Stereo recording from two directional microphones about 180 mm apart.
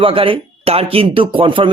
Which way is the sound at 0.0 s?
30° right (ahead or behind).